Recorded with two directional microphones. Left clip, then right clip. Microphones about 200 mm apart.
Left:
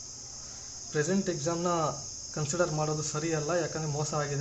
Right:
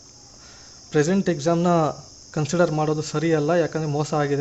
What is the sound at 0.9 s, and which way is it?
Speech, 45° right (ahead or behind).